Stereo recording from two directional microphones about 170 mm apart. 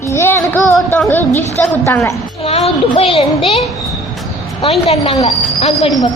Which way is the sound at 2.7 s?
35° left (ahead or behind).